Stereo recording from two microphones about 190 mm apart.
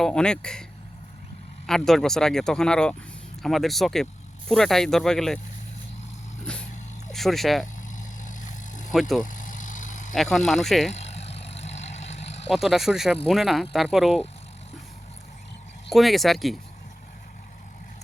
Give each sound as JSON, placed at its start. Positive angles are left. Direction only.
{"t": 0.0, "sound": "speech", "side_deg": 5}
{"t": 1.6, "sound": "speech", "side_deg": 0}
{"t": 6.4, "sound": "vehicle", "side_deg": 5}
{"t": 7.1, "sound": "speech", "side_deg": 0}
{"t": 7.8, "sound": "vehicle", "side_deg": 40}
{"t": 8.9, "sound": "speech", "side_deg": 0}
{"t": 9.2, "sound": "vehicle", "side_deg": 45}
{"t": 10.2, "sound": "speech", "side_deg": 0}
{"t": 12.5, "sound": "speech", "side_deg": 0}
{"t": 15.9, "sound": "speech", "side_deg": 0}